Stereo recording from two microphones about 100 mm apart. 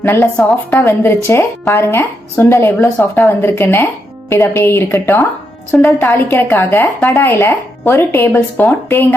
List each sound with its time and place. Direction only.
0.0 s a woman's voice: 20° left (ahead or behind)